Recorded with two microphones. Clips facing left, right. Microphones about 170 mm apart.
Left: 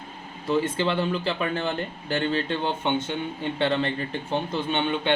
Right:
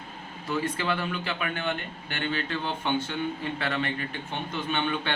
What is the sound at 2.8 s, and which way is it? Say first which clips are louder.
A man's voice: left 2 dB; 20° left (ahead or behind).